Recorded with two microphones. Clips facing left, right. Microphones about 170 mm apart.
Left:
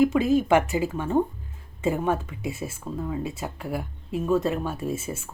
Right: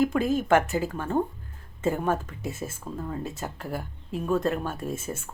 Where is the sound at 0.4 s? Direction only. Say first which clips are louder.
Left 1 dB; 10° left (ahead or behind).